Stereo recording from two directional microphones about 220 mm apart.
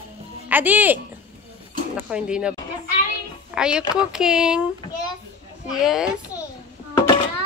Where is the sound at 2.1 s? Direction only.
5° right (ahead or behind).